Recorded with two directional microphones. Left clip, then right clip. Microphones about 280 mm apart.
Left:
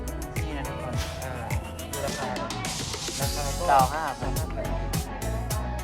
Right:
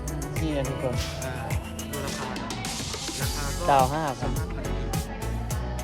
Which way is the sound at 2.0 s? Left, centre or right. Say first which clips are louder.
Left 4 dB; centre.